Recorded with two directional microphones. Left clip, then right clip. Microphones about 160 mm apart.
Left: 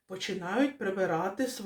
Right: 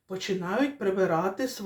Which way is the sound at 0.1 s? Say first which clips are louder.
Right 4 dB; 25° left (ahead or behind).